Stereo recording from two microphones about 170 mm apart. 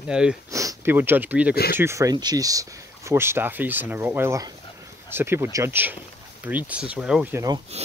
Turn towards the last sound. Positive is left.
turn(degrees=-40)  # may be behind; listen again after turning